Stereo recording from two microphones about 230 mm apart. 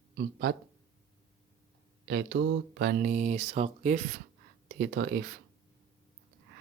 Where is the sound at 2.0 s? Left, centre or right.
Right.